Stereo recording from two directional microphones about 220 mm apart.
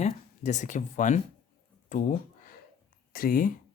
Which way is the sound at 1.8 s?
35° left (ahead or behind).